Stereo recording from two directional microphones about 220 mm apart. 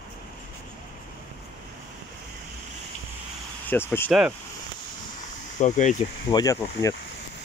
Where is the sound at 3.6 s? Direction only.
10° left (ahead or behind).